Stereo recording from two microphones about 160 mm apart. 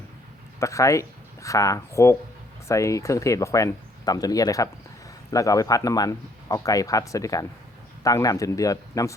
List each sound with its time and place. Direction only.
0.6 s a man's voice: 20° left (ahead or behind)